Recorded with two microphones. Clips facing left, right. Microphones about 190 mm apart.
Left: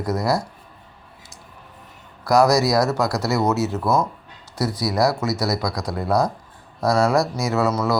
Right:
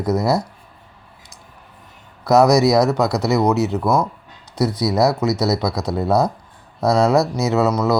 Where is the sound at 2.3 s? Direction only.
20° right (ahead or behind).